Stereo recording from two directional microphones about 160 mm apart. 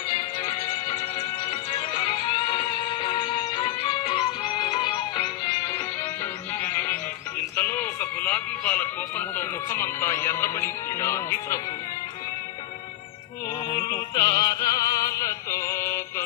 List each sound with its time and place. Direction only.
1.4 s music: 30° left (ahead or behind)
6.6 s music: 10° left (ahead or behind)
13.9 s opera: 25° left (ahead or behind)